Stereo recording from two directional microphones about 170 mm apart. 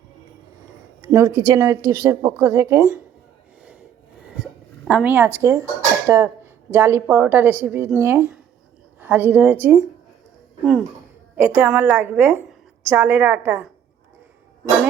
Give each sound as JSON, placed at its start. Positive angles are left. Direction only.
{"t": 1.0, "sound": "a woman's voice", "side_deg": -15}
{"t": 4.9, "sound": "a woman's voice", "side_deg": -10}